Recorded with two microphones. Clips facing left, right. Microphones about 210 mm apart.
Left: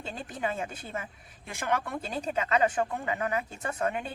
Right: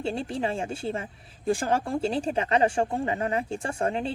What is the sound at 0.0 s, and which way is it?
Speech, 30° right (ahead or behind).